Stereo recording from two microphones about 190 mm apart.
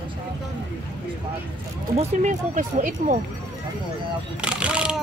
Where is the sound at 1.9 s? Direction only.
40° right (ahead or behind).